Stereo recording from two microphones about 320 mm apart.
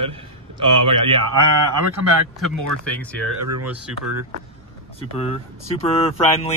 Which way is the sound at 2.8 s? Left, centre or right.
Centre.